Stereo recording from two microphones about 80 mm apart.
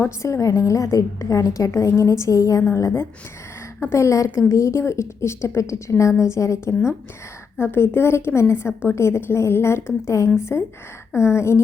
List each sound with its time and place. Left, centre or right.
0.0 s a woman's voice: left
7.6 s a woman's voice: left